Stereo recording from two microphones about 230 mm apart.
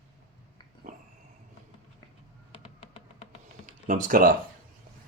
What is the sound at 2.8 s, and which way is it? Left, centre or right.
Music, left.